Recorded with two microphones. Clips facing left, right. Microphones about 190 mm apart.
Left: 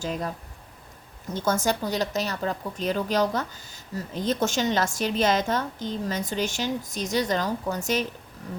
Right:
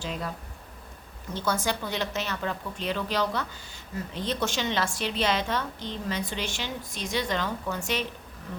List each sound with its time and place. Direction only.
0.0 s a woman's voice: 45° left (ahead or behind)
1.3 s a woman's voice: 45° left (ahead or behind)